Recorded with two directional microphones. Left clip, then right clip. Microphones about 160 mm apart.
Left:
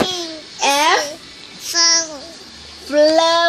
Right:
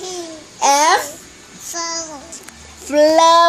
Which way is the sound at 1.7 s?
15° right (ahead or behind).